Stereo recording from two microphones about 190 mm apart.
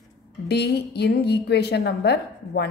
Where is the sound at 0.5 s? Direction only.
60° left (ahead or behind).